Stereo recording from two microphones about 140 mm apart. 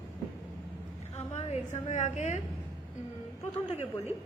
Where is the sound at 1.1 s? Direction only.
50° left (ahead or behind).